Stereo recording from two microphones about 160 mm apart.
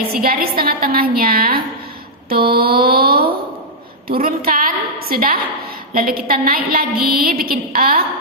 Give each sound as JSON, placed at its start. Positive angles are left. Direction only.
{"t": 0.1, "sound": "a woman's voice", "side_deg": -65}